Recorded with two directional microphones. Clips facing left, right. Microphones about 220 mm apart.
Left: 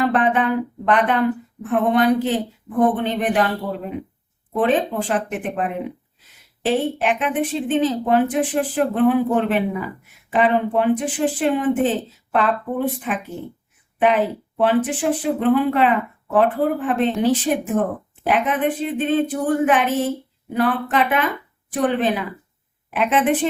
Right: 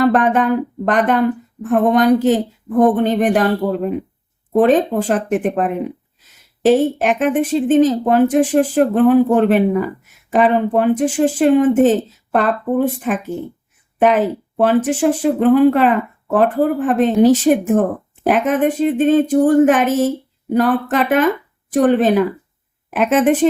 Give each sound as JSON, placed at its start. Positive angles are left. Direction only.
{"t": 0.0, "sound": "speech", "side_deg": -45}
{"t": 4.5, "sound": "speech", "side_deg": -45}